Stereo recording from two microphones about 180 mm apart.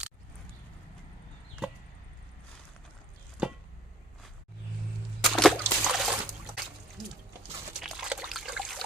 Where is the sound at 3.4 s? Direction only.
5° right (ahead or behind).